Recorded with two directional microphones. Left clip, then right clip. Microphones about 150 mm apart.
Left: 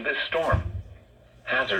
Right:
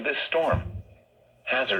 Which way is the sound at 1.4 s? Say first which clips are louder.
Even; 15° right (ahead or behind).